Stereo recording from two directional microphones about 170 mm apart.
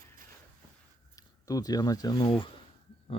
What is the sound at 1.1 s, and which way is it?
Speech, 20° left (ahead or behind).